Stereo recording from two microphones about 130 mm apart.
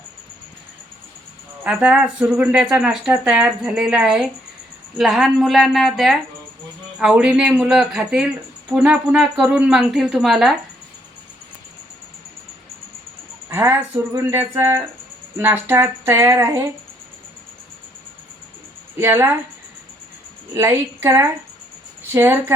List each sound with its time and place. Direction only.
1.6 s speech: 10° right (ahead or behind)
13.5 s speech: 20° right (ahead or behind)
18.9 s speech: 20° right (ahead or behind)
20.6 s speech: 20° right (ahead or behind)